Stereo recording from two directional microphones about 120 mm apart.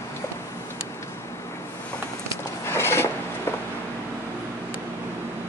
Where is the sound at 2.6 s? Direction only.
20° left (ahead or behind).